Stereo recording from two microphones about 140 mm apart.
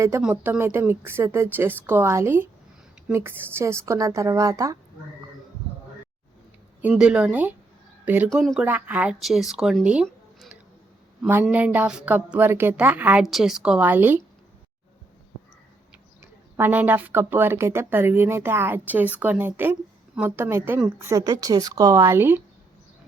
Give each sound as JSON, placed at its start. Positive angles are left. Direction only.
{"t": 0.2, "sound": "a woman's voice", "side_deg": -5}
{"t": 6.8, "sound": "a woman's voice", "side_deg": -10}
{"t": 8.3, "sound": "a woman's voice", "side_deg": 0}
{"t": 16.2, "sound": "a woman's voice", "side_deg": -15}